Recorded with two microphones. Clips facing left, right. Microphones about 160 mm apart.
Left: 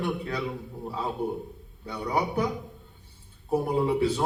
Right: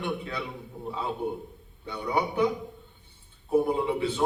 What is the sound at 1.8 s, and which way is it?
Speech, 35° left (ahead or behind).